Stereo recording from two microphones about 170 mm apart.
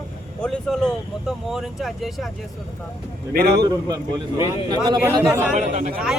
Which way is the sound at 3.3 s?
65° right (ahead or behind).